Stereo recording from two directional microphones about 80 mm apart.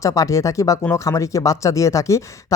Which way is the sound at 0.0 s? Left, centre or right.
Left.